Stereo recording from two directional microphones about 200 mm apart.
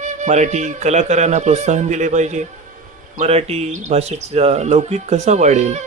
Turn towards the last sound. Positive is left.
turn(degrees=-35)  # may be behind; listen again after turning